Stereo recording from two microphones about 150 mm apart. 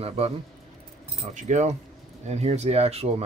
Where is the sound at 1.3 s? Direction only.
55° right (ahead or behind).